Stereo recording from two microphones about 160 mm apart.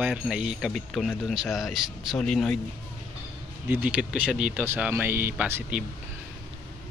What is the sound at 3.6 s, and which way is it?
Speech, 10° right (ahead or behind).